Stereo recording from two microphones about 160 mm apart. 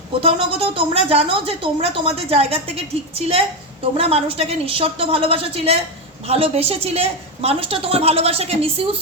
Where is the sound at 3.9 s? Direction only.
40° right (ahead or behind).